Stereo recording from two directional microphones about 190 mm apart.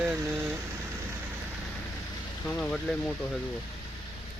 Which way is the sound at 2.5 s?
5° left (ahead or behind).